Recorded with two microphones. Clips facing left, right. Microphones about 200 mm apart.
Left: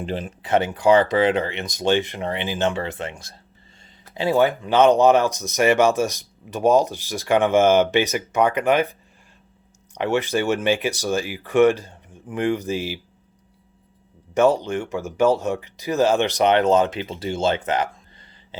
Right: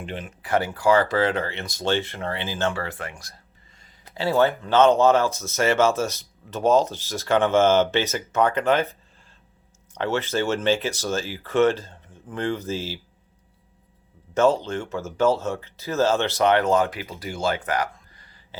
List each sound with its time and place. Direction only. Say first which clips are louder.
0.0 s speech: left 6 dB; 35° left (ahead or behind)
0.4 s speech: left 3 dB; 20° left (ahead or behind)
14.3 s speech: left 2 dB; 15° left (ahead or behind)